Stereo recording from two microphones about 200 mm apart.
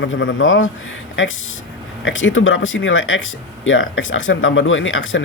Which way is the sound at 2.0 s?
70° left (ahead or behind).